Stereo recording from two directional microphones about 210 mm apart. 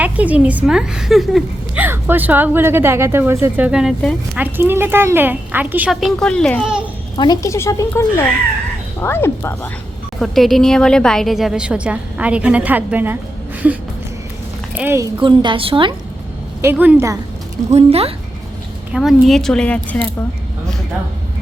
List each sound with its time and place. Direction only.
0.0 s a woman's voice: 5° right (ahead or behind)
7.2 s speech: 15° left (ahead or behind)
10.2 s a woman's voice: centre (ahead or behind); by 15.9 s 25° right (ahead or behind)
16.6 s a woman's voice: 10° right (ahead or behind)
17.7 s a woman's voice: 30° right (ahead or behind)
18.9 s a woman's voice: centre (ahead or behind)